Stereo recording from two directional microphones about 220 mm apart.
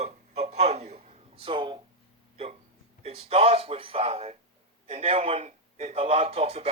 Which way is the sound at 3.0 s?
25° right (ahead or behind).